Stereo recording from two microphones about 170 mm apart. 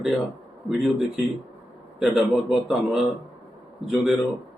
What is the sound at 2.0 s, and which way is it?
A man's voice, 5° right (ahead or behind).